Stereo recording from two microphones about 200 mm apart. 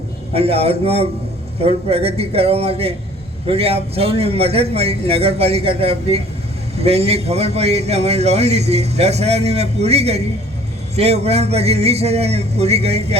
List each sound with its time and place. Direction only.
0.3 s a man's voice: 30° right (ahead or behind)